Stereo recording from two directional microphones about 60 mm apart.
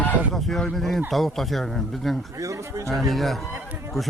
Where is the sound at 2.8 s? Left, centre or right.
Centre.